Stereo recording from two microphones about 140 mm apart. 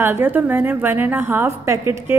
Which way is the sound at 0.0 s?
15° right (ahead or behind).